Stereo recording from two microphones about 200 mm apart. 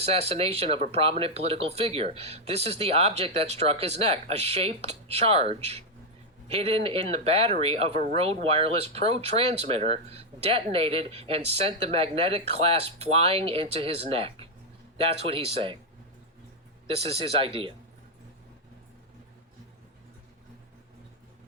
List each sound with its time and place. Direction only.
0.0 s speech: 30° right (ahead or behind)
16.8 s speech: 30° right (ahead or behind)